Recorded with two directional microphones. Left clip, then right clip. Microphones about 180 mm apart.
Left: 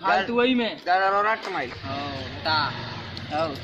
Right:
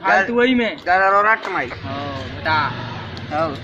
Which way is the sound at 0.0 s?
Centre (ahead or behind).